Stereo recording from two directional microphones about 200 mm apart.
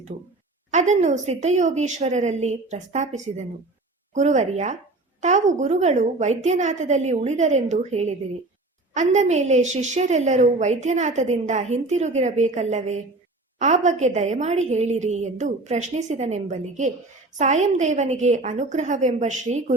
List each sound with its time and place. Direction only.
0.7 s a woman's voice: 35° right (ahead or behind)